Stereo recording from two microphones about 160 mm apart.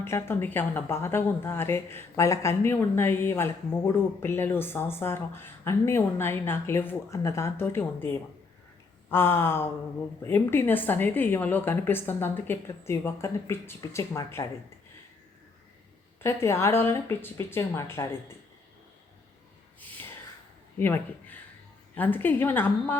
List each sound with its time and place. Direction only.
0.0 s a woman's voice: 15° left (ahead or behind)
16.2 s a woman's voice: 15° left (ahead or behind)
20.7 s a woman's voice: 15° left (ahead or behind)